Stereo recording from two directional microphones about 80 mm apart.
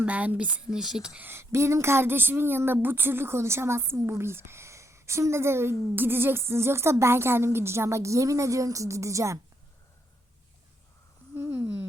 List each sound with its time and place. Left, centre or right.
0.0 s speech: centre
0.7 s speech: centre
1.2 s a woman's voice: right
11.3 s a sound: right